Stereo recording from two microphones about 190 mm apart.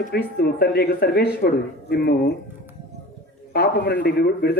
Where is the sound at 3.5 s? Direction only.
55° left (ahead or behind).